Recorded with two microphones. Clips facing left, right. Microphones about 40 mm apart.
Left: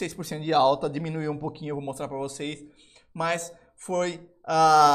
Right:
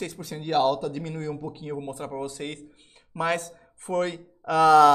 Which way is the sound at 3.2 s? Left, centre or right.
Right.